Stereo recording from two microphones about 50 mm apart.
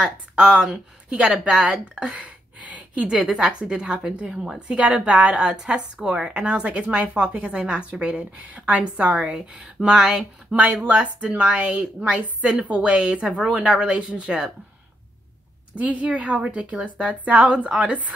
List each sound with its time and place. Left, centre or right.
0.0 s a woman's voice: centre
3.3 s a woman's voice: centre
9.8 s a woman's voice: centre
11.0 s a woman's voice: right
15.9 s a woman's voice: right